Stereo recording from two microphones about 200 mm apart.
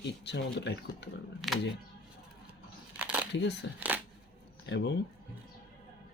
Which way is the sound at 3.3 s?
60° left (ahead or behind).